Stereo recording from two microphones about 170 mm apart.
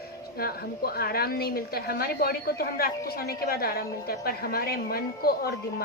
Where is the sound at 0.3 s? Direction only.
65° left (ahead or behind).